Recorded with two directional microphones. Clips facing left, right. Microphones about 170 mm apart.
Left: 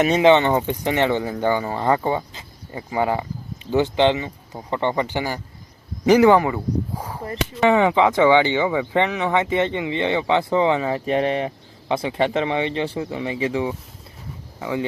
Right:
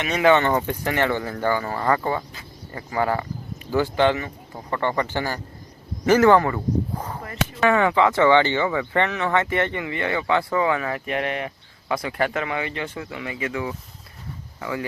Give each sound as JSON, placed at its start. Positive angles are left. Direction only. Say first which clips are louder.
{"t": 0.2, "sound": "speech", "louder": "right 1 dB", "side_deg": 20}
{"t": 7.2, "sound": "speech", "louder": "left 3 dB", "side_deg": 25}